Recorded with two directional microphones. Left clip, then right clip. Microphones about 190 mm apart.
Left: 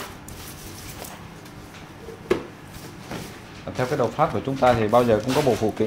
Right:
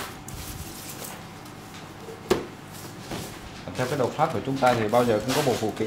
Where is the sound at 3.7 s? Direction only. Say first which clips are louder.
Left 3 dB; 50° left (ahead or behind).